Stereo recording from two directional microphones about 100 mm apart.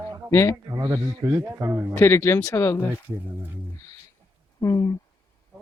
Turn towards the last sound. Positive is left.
turn(degrees=35)  # may be behind; listen again after turning